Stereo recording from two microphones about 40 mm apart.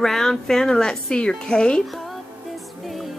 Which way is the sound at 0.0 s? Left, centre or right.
Centre.